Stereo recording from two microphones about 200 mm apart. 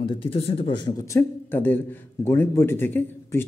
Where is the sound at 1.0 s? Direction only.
10° left (ahead or behind).